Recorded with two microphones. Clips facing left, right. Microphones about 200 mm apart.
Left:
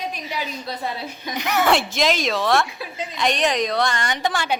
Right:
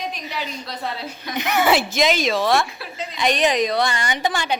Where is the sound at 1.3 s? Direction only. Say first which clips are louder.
Right 1 dB; centre (ahead or behind).